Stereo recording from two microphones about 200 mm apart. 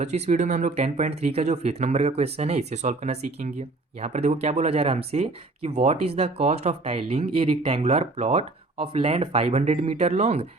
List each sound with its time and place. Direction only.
0.0 s speech: 35° right (ahead or behind)